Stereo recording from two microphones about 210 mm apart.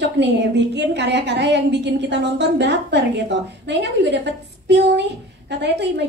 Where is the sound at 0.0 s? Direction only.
55° right (ahead or behind).